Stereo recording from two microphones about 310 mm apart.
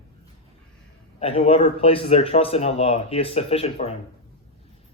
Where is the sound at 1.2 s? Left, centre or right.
Centre.